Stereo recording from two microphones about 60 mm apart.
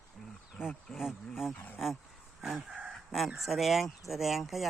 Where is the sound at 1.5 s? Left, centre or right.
Left.